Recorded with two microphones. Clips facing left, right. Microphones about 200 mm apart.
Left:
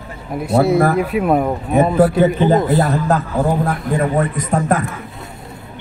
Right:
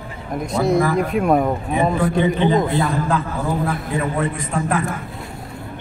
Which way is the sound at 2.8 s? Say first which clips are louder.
Left 4 dB; 40° left (ahead or behind).